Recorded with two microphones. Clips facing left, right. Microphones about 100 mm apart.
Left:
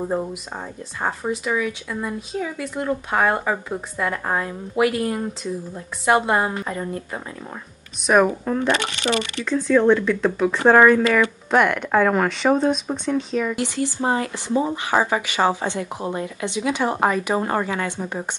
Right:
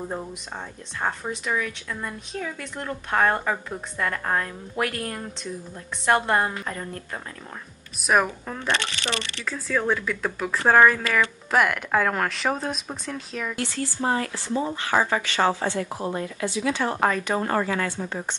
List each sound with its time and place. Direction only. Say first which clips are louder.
0.0 s speech: left 7 dB; 15° left (ahead or behind)
8.1 s speech: left 5 dB; centre (ahead or behind)
9.4 s speech: left 10 dB; 5° right (ahead or behind)
13.6 s speech: left 4 dB; 20° left (ahead or behind)